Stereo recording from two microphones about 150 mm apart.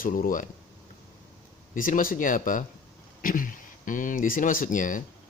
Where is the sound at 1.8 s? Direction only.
65° left (ahead or behind).